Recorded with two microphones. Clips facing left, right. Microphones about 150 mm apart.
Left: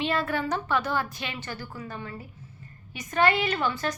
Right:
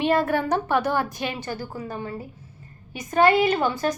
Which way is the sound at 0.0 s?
50° right (ahead or behind).